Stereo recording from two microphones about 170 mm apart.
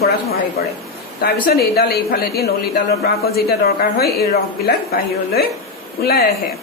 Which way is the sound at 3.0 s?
65° left (ahead or behind).